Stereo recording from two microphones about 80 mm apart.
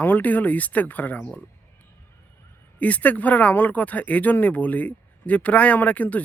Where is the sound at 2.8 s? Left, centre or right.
Centre.